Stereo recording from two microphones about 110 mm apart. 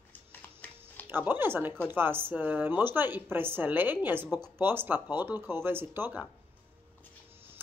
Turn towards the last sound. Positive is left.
turn(degrees=-20)  # may be behind; listen again after turning